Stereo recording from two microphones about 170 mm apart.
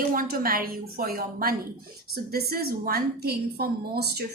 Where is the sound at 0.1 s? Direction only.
60° right (ahead or behind).